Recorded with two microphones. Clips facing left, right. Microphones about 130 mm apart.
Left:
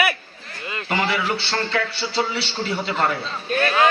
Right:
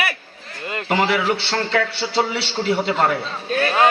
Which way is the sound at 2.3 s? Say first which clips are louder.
Right 4 dB; 65° right (ahead or behind).